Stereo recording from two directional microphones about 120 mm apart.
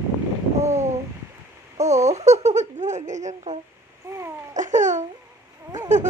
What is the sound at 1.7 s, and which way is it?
Baby laughter, 70° right (ahead or behind).